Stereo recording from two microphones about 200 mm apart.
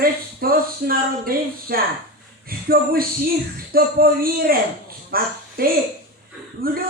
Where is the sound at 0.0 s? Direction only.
45° right (ahead or behind).